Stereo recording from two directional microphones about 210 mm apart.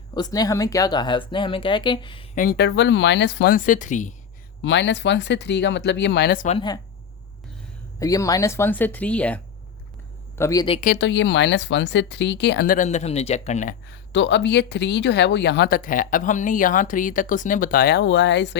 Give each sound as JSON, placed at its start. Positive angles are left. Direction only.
{"t": 0.1, "sound": "speech", "side_deg": 20}
{"t": 2.3, "sound": "speech", "side_deg": 45}
{"t": 4.6, "sound": "speech", "side_deg": 60}
{"t": 6.4, "sound": "speech", "side_deg": 30}
{"t": 7.9, "sound": "speech", "side_deg": 15}
{"t": 11.0, "sound": "speech", "side_deg": 60}
{"t": 13.8, "sound": "speech", "side_deg": 60}